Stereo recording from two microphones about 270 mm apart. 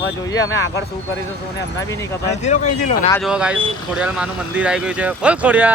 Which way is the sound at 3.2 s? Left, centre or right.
Centre.